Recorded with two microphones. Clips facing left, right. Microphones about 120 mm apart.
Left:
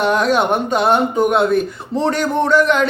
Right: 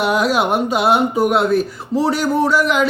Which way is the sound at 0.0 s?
5° right (ahead or behind).